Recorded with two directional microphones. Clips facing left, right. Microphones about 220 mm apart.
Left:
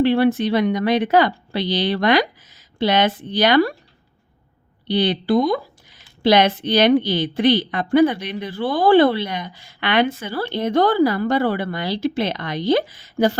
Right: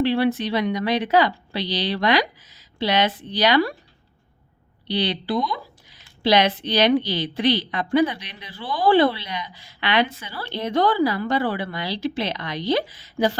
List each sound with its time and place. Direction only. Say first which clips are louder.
0.0 s a woman's voice: left 4 dB; 50° left (ahead or behind)
4.9 s a woman's voice: left 6 dB; 50° left (ahead or behind)